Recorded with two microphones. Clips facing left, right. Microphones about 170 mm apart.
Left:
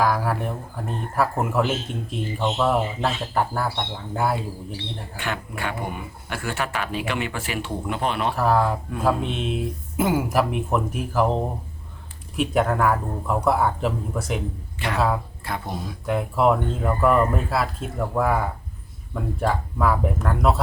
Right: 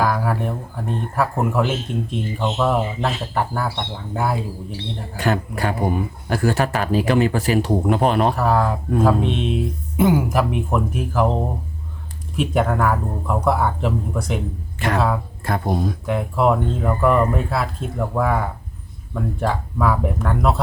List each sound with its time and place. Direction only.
0.0 s speech: centre (ahead or behind)
5.1 s speech: 40° right (ahead or behind)
8.4 s speech: centre (ahead or behind)
14.8 s speech: 50° right (ahead or behind)
16.0 s speech: centre (ahead or behind)